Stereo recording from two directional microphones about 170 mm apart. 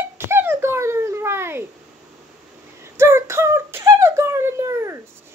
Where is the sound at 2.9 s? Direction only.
15° right (ahead or behind).